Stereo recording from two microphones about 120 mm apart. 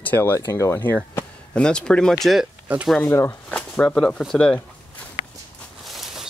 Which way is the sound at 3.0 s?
20° left (ahead or behind).